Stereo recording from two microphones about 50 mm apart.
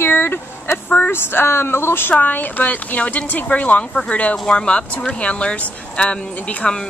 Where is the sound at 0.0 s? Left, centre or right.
Left.